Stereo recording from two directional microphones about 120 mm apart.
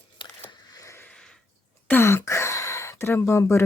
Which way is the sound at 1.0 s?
5° left (ahead or behind).